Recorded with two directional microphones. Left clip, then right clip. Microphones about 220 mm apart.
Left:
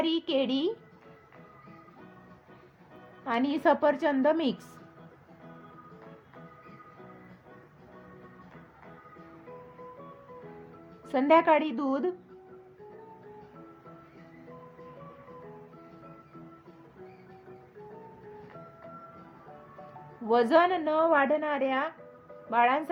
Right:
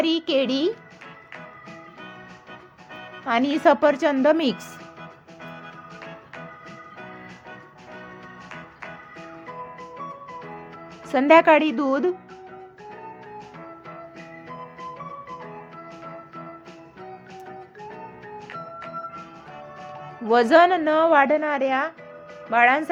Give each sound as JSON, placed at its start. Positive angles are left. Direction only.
{"t": 0.0, "sound": "a woman's voice", "side_deg": -15}
{"t": 3.2, "sound": "a woman's voice", "side_deg": -15}
{"t": 11.0, "sound": "a woman's voice", "side_deg": -20}
{"t": 20.2, "sound": "a woman's voice", "side_deg": -15}